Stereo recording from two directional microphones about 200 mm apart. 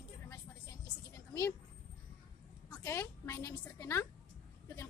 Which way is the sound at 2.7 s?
15° left (ahead or behind).